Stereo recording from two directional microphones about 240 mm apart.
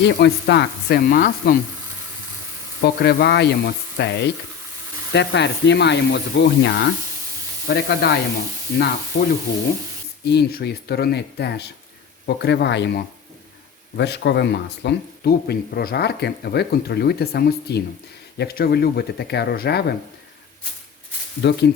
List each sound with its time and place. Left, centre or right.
0.0 s speech: left
2.8 s speech: left
9.1 s speech: left
21.4 s speech: left